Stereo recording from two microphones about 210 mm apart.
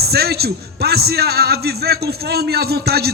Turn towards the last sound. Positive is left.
turn(degrees=-50)  # may be behind; listen again after turning